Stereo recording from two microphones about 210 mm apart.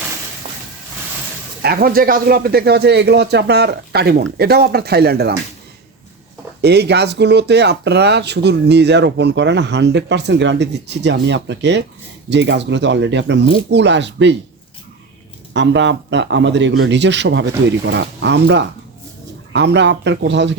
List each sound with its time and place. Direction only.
0.4 s a sound: 25° right (ahead or behind)
1.6 s speech: 45° right (ahead or behind)
6.6 s speech: 50° right (ahead or behind)
15.5 s speech: 60° right (ahead or behind)